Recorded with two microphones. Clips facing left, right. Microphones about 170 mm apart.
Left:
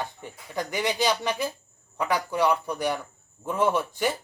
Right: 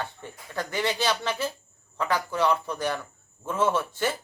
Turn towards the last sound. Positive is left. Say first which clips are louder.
# left 1 dB
turn(degrees=15)  # may be behind; listen again after turning